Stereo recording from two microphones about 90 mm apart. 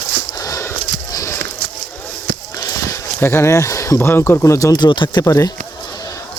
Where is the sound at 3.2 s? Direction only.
25° left (ahead or behind).